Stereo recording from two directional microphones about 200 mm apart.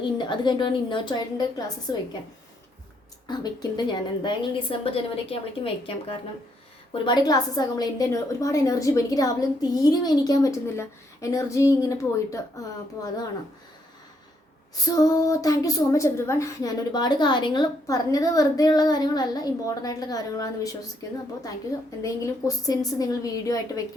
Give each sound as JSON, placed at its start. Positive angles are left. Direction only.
{"t": 0.3, "sound": "a woman's voice", "side_deg": 25}
{"t": 3.2, "sound": "a woman's voice", "side_deg": 20}
{"t": 14.8, "sound": "a woman's voice", "side_deg": 15}
{"t": 22.0, "sound": "a woman's voice", "side_deg": 15}